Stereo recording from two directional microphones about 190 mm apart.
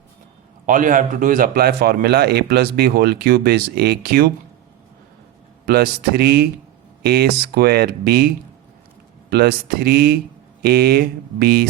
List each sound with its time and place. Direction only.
0.6 s a man's voice: 45° right (ahead or behind)
5.6 s a man's voice: 55° right (ahead or behind)
9.3 s a man's voice: 55° right (ahead or behind)